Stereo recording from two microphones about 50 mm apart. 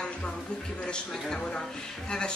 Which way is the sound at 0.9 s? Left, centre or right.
Centre.